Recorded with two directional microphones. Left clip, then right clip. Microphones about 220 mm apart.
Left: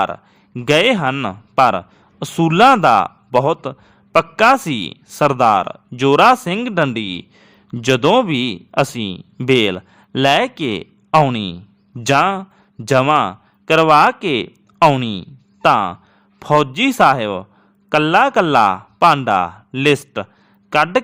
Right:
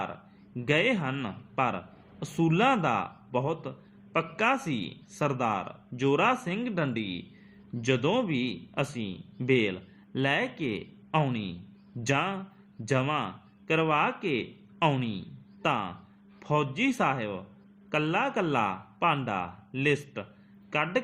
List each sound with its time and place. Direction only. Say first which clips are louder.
0.0 s a man's voice: left 17 dB; 50° left (ahead or behind)